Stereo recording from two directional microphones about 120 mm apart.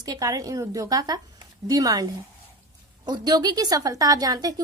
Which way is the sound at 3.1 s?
35° right (ahead or behind).